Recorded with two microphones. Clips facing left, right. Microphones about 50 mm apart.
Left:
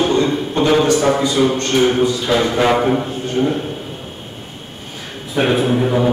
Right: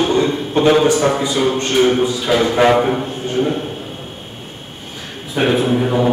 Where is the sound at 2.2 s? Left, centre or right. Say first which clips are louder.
Right 1 dB; centre.